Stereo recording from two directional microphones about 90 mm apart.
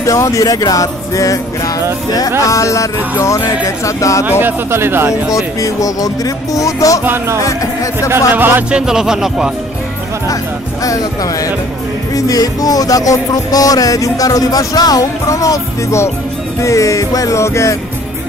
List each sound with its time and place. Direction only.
0.0 s music: 35° left (ahead or behind)
2.4 s music: 35° left (ahead or behind)
4.3 s speech: 20° right (ahead or behind)
5.3 s music: 40° left (ahead or behind)
8.3 s speech: 20° right (ahead or behind)
8.6 s speech: 10° right (ahead or behind)
10.8 s music: 40° left (ahead or behind)